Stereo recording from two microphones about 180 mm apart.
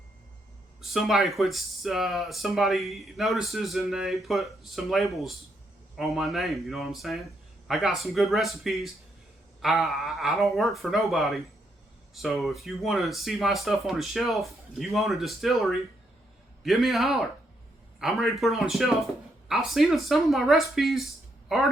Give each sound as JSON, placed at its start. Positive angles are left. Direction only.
{"t": 0.8, "sound": "speech", "side_deg": 0}